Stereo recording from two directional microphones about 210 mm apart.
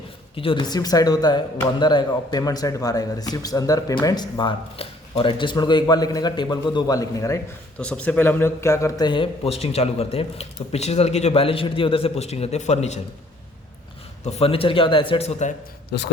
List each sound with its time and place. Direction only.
0.3 s speech: 25° left (ahead or behind)
14.3 s speech: 30° left (ahead or behind)